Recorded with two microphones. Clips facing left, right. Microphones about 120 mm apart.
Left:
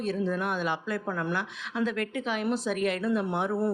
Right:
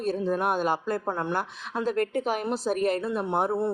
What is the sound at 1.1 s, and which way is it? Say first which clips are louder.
Speech: even; 25° right (ahead or behind).